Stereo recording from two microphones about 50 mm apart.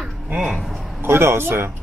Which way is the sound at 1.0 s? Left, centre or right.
Right.